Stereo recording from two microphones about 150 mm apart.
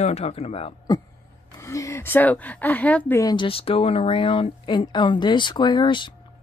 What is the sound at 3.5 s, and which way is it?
Speech, 40° left (ahead or behind).